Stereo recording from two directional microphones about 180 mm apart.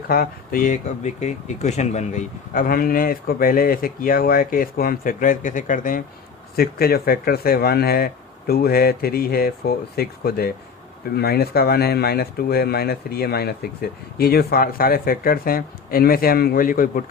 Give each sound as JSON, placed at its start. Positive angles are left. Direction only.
{"t": 0.1, "sound": "speech", "side_deg": 50}
{"t": 6.6, "sound": "speech", "side_deg": 60}